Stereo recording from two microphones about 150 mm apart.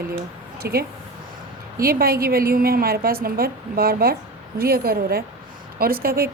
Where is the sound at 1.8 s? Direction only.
80° right.